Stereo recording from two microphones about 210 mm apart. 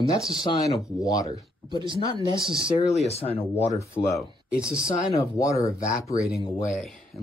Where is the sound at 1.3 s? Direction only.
25° right (ahead or behind).